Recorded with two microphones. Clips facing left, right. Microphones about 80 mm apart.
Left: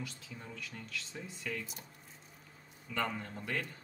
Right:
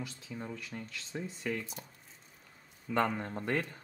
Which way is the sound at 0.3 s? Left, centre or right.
Centre.